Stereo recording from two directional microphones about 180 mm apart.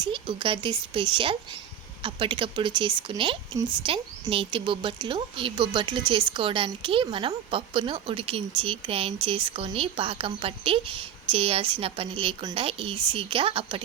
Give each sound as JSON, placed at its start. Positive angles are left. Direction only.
{"t": 0.0, "sound": "a woman's voice", "side_deg": -25}